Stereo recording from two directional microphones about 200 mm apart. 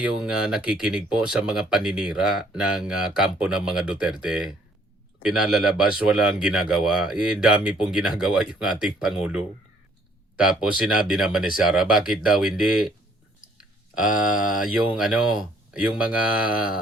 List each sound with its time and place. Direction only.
0.0 s speech: 5° right (ahead or behind)